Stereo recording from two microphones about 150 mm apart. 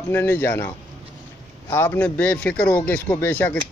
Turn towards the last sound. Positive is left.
turn(degrees=10)  # may be behind; listen again after turning